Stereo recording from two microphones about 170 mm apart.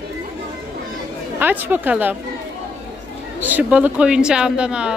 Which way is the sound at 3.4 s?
10° right (ahead or behind).